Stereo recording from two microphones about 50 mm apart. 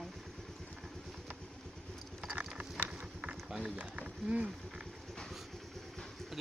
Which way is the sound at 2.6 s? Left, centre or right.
Right.